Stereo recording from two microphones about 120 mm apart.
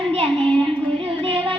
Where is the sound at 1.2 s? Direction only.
50° right (ahead or behind).